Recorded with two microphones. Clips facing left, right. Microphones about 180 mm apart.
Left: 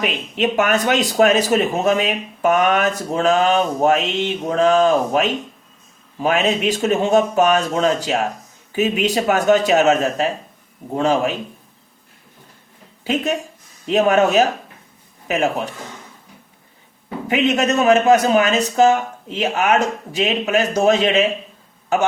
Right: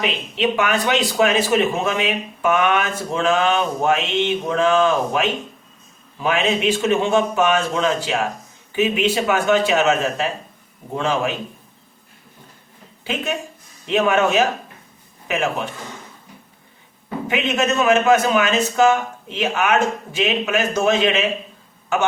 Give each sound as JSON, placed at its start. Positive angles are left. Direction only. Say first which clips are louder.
{"t": 0.0, "sound": "speech", "louder": "left 1 dB", "side_deg": 45}
{"t": 13.8, "sound": "speech", "louder": "left 3 dB", "side_deg": 40}
{"t": 17.2, "sound": "speech", "louder": "left 3 dB", "side_deg": 40}